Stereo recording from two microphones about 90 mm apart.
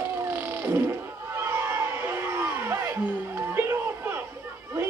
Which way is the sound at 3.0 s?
20° right (ahead or behind).